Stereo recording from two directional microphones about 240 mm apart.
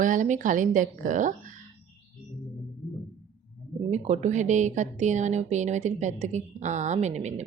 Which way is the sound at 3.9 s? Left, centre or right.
Right.